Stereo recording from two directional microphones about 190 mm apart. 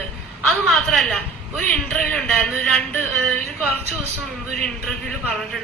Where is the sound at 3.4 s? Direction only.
35° right (ahead or behind).